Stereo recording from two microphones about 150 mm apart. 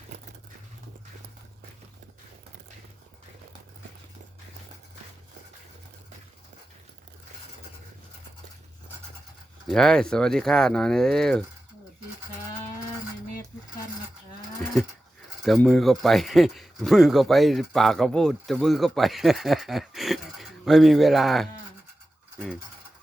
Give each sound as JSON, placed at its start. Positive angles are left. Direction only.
{"t": 0.1, "sound": "a sound", "side_deg": -70}
{"t": 9.6, "sound": "speech", "side_deg": 5}
{"t": 15.4, "sound": "speech", "side_deg": 5}